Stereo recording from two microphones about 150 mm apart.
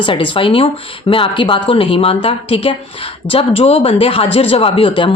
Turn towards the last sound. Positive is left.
turn(degrees=35)  # may be behind; listen again after turning